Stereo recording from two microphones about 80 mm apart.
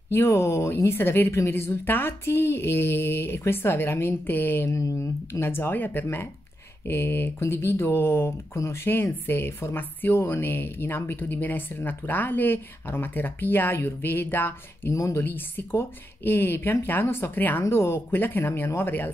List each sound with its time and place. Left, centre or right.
0.1 s speech: left
4.7 s speech: left
14.9 s speech: left
15.2 s speech: left